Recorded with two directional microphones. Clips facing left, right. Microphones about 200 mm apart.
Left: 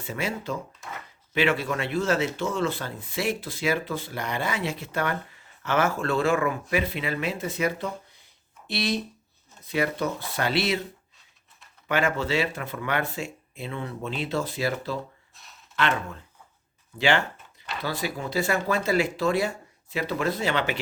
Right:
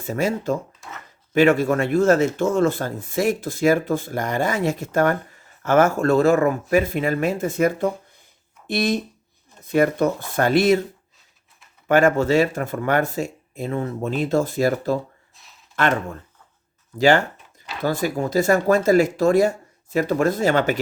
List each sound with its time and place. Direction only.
0.0 s speech: 45° right (ahead or behind)
0.8 s drawer open or close: centre (ahead or behind)
1.3 s speech: 45° right (ahead or behind)
11.9 s speech: 45° right (ahead or behind)
15.4 s a sound: centre (ahead or behind)
15.7 s speech: 45° right (ahead or behind)